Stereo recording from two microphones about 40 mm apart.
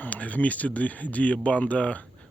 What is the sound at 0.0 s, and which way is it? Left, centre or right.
Speech, left.